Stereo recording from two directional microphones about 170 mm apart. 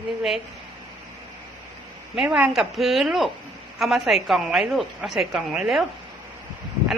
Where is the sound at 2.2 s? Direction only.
5° right (ahead or behind).